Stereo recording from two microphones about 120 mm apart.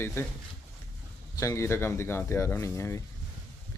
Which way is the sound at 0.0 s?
20° left (ahead or behind).